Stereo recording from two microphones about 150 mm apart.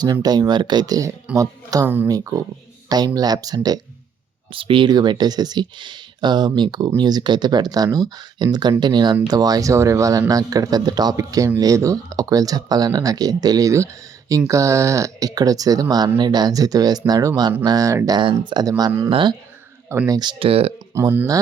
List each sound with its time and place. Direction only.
0.0 s speech: 25° right (ahead or behind)
3.2 s speech: 25° right (ahead or behind)
18.9 s speech: 15° right (ahead or behind)
19.1 s speech: 30° right (ahead or behind)
19.9 s speech: 20° right (ahead or behind); by 20.7 s 40° right (ahead or behind)
20.9 s speech: 15° right (ahead or behind)